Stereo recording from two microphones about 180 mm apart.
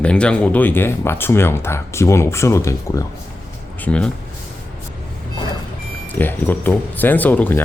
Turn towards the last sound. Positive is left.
turn(degrees=10)  # may be behind; listen again after turning